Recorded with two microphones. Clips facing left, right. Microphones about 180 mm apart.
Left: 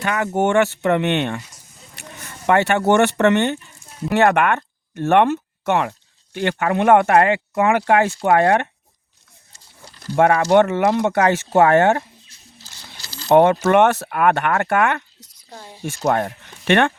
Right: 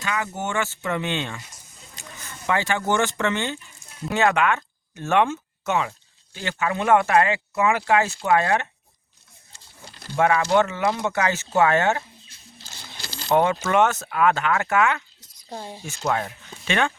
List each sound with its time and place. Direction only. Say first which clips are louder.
0.0 s speech: left 8 dB; 60° left (ahead or behind)
10.1 s speech: left 5 dB; 55° left (ahead or behind)
13.2 s speech: left 7 dB; 55° left (ahead or behind)
15.4 s speech: right 5 dB; 25° right (ahead or behind)
15.8 s speech: left 7 dB; 55° left (ahead or behind)